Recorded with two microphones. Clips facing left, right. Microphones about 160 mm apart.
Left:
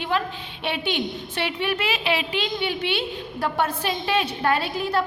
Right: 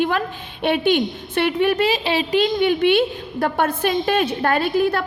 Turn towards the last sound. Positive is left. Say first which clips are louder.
# right 6 dB
turn(degrees=-55)  # may be behind; listen again after turning